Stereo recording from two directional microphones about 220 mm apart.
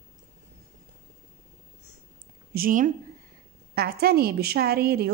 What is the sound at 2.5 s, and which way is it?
A woman's voice, 40° right (ahead or behind).